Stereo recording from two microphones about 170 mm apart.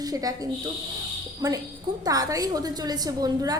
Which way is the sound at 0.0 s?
20° right (ahead or behind).